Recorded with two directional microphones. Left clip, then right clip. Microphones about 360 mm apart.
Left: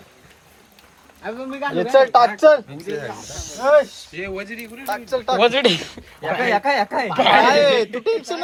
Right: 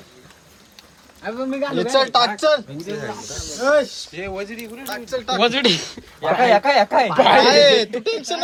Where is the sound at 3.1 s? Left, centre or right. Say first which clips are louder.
Right 2 dB; centre.